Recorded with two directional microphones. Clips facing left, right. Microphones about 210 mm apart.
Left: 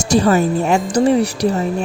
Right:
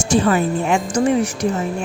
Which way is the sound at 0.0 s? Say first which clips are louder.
Left 2 dB; 40° left (ahead or behind).